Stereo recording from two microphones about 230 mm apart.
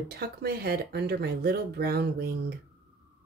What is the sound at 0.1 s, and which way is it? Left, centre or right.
Speech, right.